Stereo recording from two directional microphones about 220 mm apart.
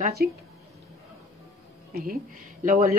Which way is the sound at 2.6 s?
35° right (ahead or behind).